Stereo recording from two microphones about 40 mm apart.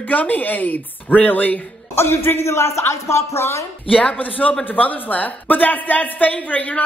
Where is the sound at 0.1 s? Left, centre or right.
Left.